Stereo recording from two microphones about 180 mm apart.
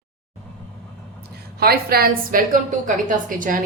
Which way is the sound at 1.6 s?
60° right (ahead or behind).